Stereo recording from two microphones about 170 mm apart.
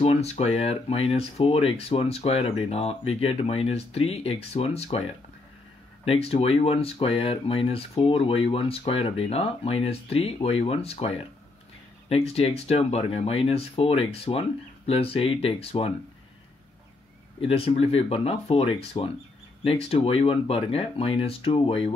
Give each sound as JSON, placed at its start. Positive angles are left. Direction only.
{"t": 0.0, "sound": "speech", "side_deg": 40}
{"t": 6.0, "sound": "speech", "side_deg": 35}
{"t": 17.4, "sound": "speech", "side_deg": 35}